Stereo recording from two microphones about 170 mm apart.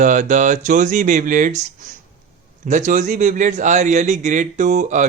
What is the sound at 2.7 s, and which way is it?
A man's voice, 45° right (ahead or behind).